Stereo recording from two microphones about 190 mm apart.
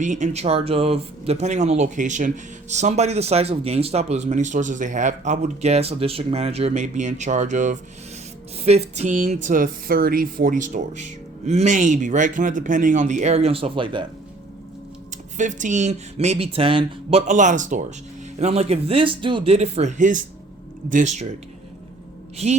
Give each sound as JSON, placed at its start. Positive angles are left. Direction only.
{"t": 0.0, "sound": "speech", "side_deg": -40}
{"t": 15.4, "sound": "speech", "side_deg": -40}
{"t": 22.4, "sound": "speech", "side_deg": -35}